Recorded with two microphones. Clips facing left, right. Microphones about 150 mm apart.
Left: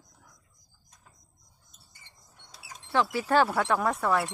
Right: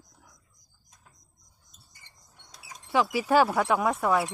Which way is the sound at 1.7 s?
Centre (ahead or behind).